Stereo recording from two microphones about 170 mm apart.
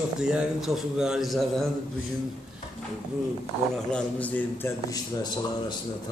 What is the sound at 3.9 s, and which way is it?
Speech, 10° left (ahead or behind).